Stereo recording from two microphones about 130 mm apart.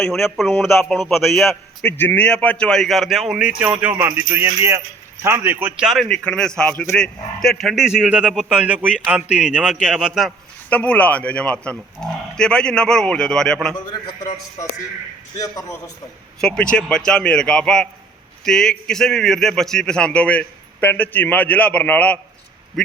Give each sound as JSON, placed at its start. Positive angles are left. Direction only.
{"t": 0.0, "sound": "a man's voice", "side_deg": 0}
{"t": 1.9, "sound": "a man's voice", "side_deg": 15}
{"t": 10.7, "sound": "speech", "side_deg": 10}
{"t": 15.4, "sound": "a man's voice", "side_deg": 25}
{"t": 16.4, "sound": "a man's voice", "side_deg": 5}